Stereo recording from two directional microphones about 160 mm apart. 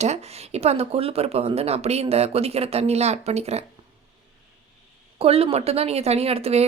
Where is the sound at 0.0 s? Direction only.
45° right (ahead or behind).